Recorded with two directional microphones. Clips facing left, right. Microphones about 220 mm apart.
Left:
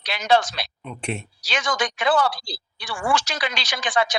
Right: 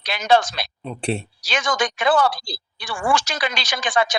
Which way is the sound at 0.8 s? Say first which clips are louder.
Right 6 dB; 35° right (ahead or behind).